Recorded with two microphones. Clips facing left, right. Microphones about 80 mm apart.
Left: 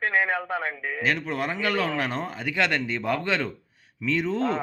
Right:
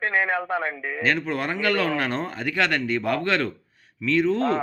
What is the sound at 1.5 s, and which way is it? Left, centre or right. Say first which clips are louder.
Speech: right 3 dB; centre.